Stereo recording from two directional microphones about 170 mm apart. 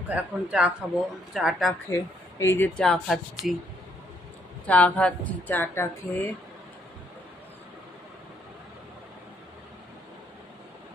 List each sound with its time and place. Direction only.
0.1 s speech: 5° right (ahead or behind)
1.9 s speech: 15° left (ahead or behind)
2.8 s speech: centre (ahead or behind)
4.6 s speech: 10° left (ahead or behind)